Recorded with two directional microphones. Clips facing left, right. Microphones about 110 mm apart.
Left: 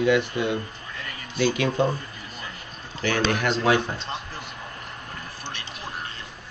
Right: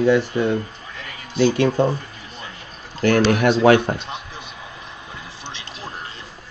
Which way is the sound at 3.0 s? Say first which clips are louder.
Right 8 dB; 45° right (ahead or behind).